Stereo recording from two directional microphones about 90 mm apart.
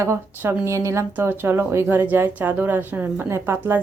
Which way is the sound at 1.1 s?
25° right (ahead or behind).